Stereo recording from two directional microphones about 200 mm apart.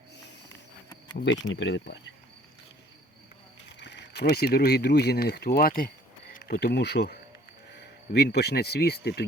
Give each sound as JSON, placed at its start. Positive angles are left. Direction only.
{"t": 1.2, "sound": "speech", "side_deg": 65}
{"t": 3.7, "sound": "speech", "side_deg": 60}